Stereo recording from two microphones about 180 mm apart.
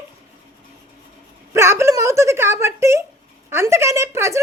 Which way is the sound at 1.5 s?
15° right (ahead or behind).